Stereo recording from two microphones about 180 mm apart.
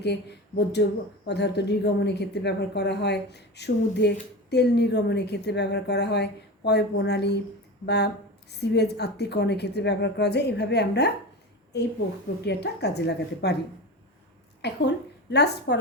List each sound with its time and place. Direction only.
0.0 s a woman's voice: 70° left (ahead or behind)
14.6 s a woman's voice: 70° left (ahead or behind)